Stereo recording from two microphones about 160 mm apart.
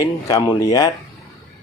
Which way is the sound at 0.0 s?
20° left (ahead or behind).